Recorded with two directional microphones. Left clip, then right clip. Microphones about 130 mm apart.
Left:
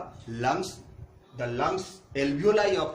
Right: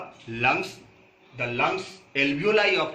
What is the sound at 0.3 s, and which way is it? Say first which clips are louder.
Speech: right 4 dB; 80° left.